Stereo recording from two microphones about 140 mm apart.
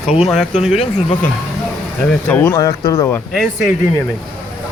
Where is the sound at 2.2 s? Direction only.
15° left (ahead or behind).